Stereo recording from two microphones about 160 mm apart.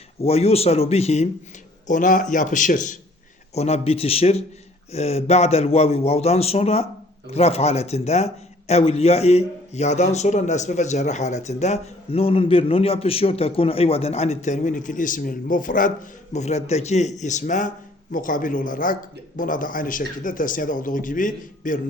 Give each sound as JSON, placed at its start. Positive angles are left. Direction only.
{"t": 0.2, "sound": "speech", "side_deg": 40}
{"t": 1.9, "sound": "speech", "side_deg": 55}
{"t": 3.5, "sound": "speech", "side_deg": 40}
{"t": 16.3, "sound": "speech", "side_deg": 45}